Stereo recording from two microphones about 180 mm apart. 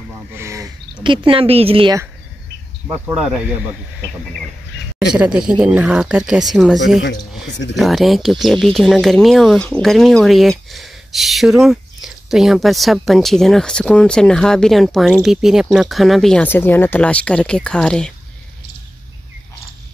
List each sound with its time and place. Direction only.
0.3 s speech: 15° right (ahead or behind)
1.0 s a woman's voice: 30° right (ahead or behind)
2.9 s speech: 5° right (ahead or behind)
5.1 s speech: 5° right (ahead or behind)
7.4 s speech: 80° left
7.7 s speech: centre (ahead or behind)